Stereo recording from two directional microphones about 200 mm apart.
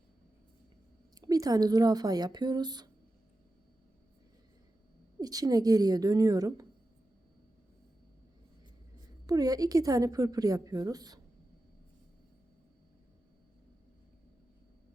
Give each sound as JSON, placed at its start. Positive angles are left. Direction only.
{"t": 1.1, "sound": "speech", "side_deg": -20}
{"t": 5.2, "sound": "a woman's voice", "side_deg": -20}
{"t": 9.2, "sound": "a woman's voice", "side_deg": -20}